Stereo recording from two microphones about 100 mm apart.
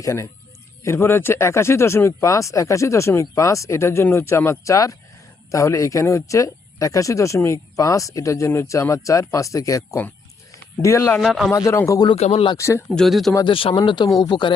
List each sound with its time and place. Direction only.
0.0 s speech: 30° left (ahead or behind)
10.5 s a sound: 30° left (ahead or behind)
11.2 s speech: centre (ahead or behind)
11.5 s speech: 35° left (ahead or behind)
12.1 s speech: 90° left
12.5 s speech: 30° left (ahead or behind)
12.9 s speech: 5° left (ahead or behind)
13.4 s speech: 65° left (ahead or behind)
13.8 s speech: 50° left (ahead or behind)